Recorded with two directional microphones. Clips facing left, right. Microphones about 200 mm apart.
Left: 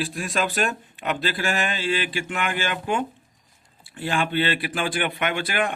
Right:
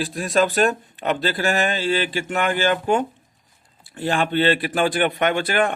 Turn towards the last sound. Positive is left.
turn(degrees=-45)  # may be behind; listen again after turning